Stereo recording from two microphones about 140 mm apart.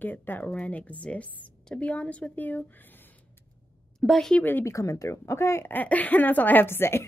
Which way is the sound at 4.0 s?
5° left (ahead or behind).